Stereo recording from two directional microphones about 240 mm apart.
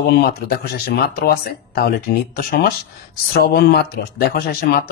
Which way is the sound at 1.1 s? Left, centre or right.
Left.